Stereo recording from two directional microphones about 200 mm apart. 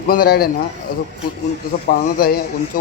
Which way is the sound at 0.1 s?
50° left (ahead or behind).